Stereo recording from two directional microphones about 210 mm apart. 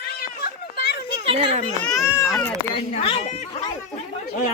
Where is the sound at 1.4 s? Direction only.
30° right (ahead or behind).